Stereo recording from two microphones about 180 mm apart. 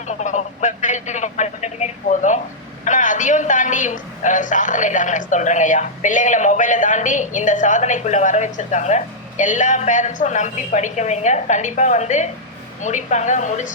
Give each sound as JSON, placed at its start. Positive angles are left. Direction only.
{"t": 0.1, "sound": "telephone", "side_deg": 40}
{"t": 2.8, "sound": "a woman's voice", "side_deg": 45}